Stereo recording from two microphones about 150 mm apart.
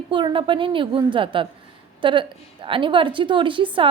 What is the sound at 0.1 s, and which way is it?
A woman's voice, 35° right (ahead or behind).